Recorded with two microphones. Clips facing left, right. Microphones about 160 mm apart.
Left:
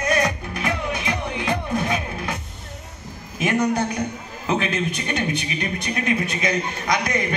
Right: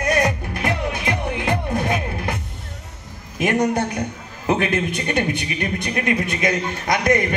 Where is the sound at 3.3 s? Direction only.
55° right (ahead or behind).